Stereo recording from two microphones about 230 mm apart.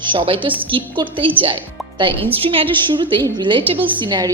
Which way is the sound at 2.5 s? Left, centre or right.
Right.